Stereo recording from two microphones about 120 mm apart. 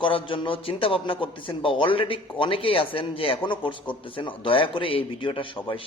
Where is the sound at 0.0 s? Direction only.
45° left (ahead or behind).